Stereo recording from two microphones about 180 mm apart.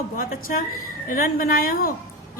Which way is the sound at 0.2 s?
50° left (ahead or behind).